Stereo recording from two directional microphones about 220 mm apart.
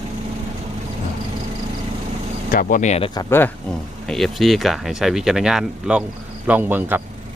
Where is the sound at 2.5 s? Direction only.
40° left (ahead or behind).